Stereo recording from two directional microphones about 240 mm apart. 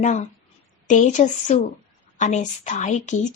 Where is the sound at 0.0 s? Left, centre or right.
Left.